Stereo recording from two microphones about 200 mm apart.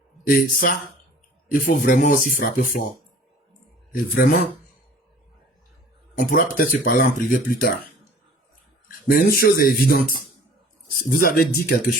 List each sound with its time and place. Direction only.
0.3 s speech: 45° left (ahead or behind)
4.1 s speech: 45° left (ahead or behind)
6.1 s speech: 40° left (ahead or behind)
9.0 s speech: 50° left (ahead or behind)